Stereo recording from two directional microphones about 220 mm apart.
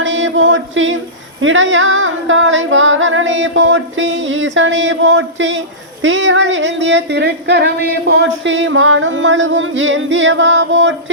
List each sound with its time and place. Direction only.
0.0 s chant: 55° right (ahead or behind)
1.4 s music: 60° right (ahead or behind)